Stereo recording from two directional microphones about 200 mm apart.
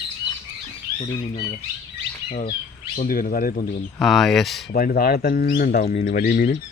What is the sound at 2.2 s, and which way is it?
Speech, 40° left (ahead or behind).